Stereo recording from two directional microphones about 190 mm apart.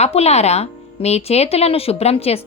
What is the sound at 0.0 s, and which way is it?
A woman's voice, 35° left (ahead or behind).